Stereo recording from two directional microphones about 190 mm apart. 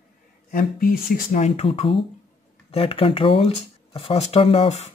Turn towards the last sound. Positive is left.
turn(degrees=35)  # may be behind; listen again after turning